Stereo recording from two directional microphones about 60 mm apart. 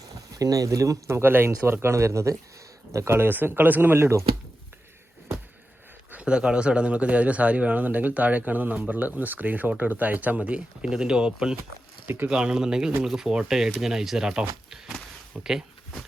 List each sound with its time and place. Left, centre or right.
0.3 s speech: right
6.1 s speech: right
10.8 s speech: centre
12.0 s speech: right
12.3 s speech: centre